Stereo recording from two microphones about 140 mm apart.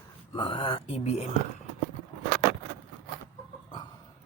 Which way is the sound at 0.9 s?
50° left (ahead or behind).